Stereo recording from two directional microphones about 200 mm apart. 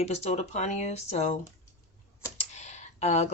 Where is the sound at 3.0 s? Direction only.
35° left (ahead or behind).